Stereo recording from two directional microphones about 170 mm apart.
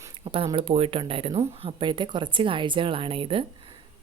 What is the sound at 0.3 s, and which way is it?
A woman's voice, 30° right (ahead or behind).